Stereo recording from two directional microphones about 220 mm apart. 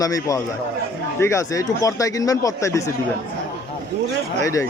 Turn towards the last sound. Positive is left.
turn(degrees=15)  # may be behind; listen again after turning